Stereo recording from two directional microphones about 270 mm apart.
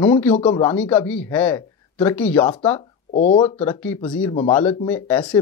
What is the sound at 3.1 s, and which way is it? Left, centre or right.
Speech, left.